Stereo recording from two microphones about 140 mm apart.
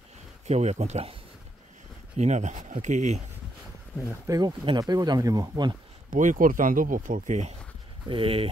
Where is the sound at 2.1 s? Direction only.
55° right (ahead or behind).